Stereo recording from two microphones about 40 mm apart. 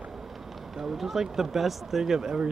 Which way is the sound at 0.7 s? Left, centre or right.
Centre.